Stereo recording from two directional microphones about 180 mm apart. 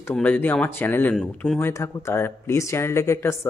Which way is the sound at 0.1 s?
10° left (ahead or behind).